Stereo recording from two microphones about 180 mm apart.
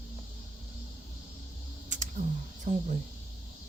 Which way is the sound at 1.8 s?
45° right (ahead or behind).